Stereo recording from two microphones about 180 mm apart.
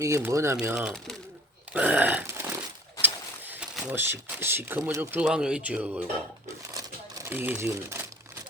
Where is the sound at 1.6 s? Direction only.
10° right (ahead or behind).